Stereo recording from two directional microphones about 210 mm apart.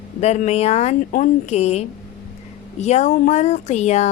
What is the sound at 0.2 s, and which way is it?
A woman's voice, 30° left (ahead or behind).